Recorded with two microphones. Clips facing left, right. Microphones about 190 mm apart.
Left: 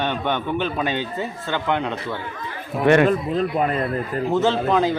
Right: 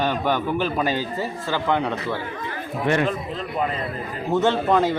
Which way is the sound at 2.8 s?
65° left (ahead or behind).